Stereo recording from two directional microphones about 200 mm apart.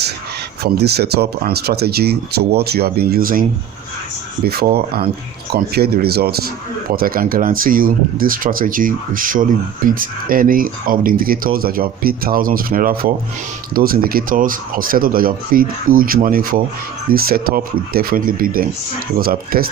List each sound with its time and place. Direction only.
0.6 s speech: 55° right (ahead or behind)
4.4 s speech: 50° right (ahead or behind)